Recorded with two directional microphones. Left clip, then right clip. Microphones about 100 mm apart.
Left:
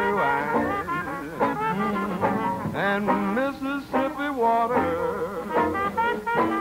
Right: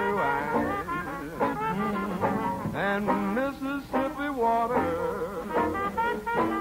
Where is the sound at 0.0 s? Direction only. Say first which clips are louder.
Left 4 dB; 35° right (ahead or behind).